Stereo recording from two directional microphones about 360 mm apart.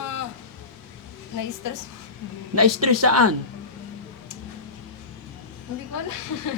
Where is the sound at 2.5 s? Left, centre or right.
Right.